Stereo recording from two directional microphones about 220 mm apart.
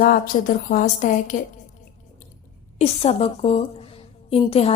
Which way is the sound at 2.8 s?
30° left (ahead or behind).